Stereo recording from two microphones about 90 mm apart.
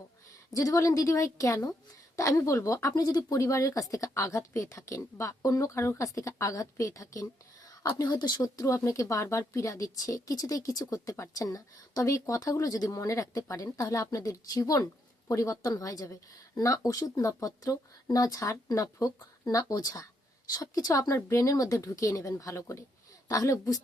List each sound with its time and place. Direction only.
0.5 s speech: 40° left (ahead or behind)
8.0 s speech: 55° left (ahead or behind)